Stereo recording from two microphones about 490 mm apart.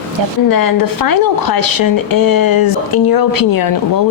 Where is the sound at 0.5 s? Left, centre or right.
Left.